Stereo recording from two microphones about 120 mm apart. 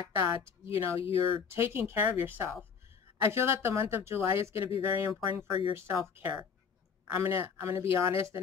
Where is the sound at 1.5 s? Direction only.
20° right (ahead or behind).